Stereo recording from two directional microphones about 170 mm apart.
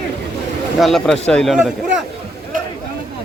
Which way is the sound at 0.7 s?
Centre (ahead or behind).